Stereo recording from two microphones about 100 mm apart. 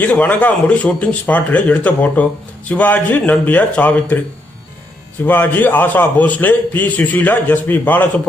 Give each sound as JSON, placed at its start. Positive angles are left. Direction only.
{"t": 0.0, "sound": "a man's voice", "side_deg": 15}
{"t": 5.2, "sound": "a man's voice", "side_deg": 20}